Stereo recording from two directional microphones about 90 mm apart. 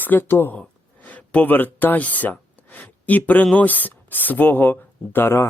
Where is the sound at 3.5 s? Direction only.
20° left (ahead or behind).